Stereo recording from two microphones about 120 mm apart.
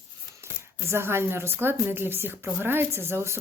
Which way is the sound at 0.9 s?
20° right (ahead or behind).